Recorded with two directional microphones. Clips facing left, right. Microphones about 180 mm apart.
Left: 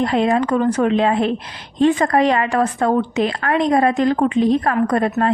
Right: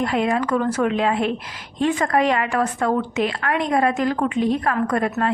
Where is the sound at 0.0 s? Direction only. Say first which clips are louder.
Left 4 dB; 35° left (ahead or behind).